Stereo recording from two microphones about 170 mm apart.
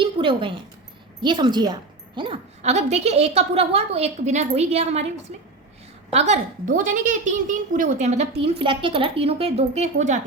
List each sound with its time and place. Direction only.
0.0 s a sound: 30° right (ahead or behind)
1.2 s a woman's voice: 25° right (ahead or behind)
6.1 s speech: 40° right (ahead or behind)